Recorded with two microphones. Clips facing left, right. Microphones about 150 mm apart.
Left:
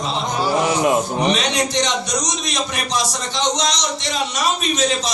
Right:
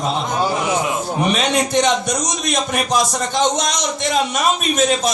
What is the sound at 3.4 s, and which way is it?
Speech, 50° right (ahead or behind).